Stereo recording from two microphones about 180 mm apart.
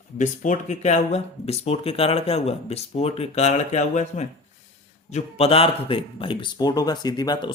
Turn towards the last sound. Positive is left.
turn(degrees=20)  # may be behind; listen again after turning